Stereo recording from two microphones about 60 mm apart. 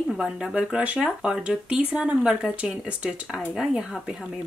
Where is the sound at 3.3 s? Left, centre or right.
Centre.